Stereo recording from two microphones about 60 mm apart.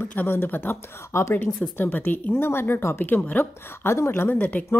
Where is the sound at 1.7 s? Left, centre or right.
Left.